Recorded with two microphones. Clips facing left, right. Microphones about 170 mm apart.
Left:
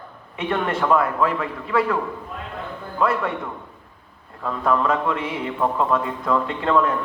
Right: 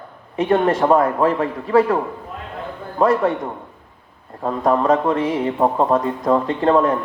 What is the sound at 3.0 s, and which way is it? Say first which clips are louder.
Speech: right 6 dB; 35° right (ahead or behind).